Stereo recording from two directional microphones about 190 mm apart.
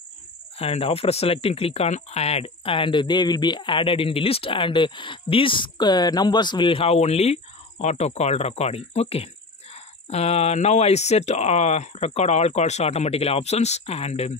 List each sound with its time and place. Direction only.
0.6 s speech: 30° left (ahead or behind)